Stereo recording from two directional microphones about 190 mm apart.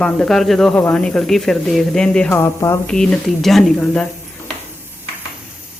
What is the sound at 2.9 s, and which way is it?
Speech, centre (ahead or behind).